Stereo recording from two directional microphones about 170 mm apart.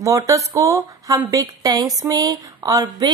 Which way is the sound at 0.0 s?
20° right (ahead or behind).